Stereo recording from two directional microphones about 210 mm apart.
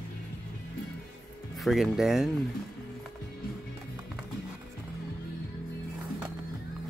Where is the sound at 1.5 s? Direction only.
Centre (ahead or behind).